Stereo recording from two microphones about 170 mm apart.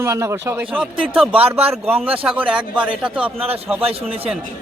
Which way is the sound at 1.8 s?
10° right (ahead or behind).